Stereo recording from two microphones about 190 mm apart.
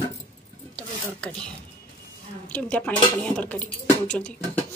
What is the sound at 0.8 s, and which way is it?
Speech, 5° left (ahead or behind).